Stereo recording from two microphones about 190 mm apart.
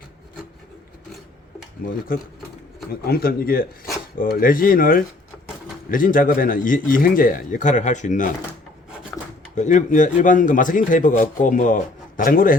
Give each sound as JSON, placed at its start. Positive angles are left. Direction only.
{"t": 2.1, "sound": "speech", "side_deg": 50}
{"t": 9.6, "sound": "speech", "side_deg": 40}